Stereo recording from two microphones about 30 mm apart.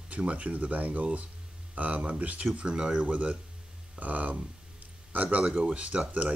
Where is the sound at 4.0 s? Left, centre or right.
Right.